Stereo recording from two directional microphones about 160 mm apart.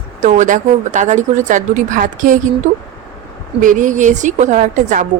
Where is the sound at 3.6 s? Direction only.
55° right (ahead or behind).